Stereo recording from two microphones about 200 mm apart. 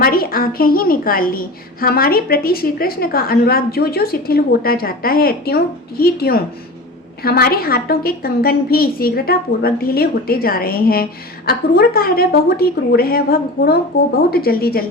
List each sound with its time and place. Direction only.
0.0 s a woman's voice: 45° left (ahead or behind)